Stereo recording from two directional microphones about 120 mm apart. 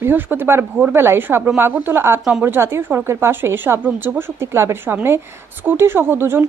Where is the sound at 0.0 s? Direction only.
15° right (ahead or behind).